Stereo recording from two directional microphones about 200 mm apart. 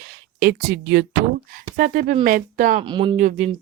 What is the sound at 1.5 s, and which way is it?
Speech, 40° right (ahead or behind).